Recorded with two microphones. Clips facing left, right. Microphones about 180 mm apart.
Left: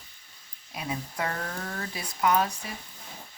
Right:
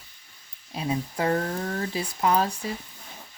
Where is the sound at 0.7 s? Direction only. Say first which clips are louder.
Right 6 dB; 30° right (ahead or behind).